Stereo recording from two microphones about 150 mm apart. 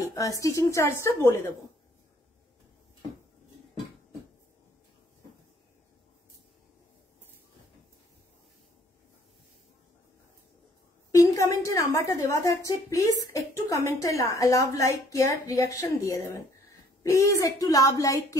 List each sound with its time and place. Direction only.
0.1 s a woman's voice: 20° left (ahead or behind)
11.1 s a woman's voice: 20° left (ahead or behind)